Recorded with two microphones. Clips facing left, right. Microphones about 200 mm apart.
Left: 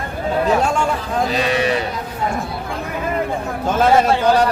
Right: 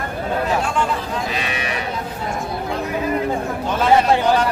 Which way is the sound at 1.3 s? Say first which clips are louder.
Left 7 dB; 35° left (ahead or behind).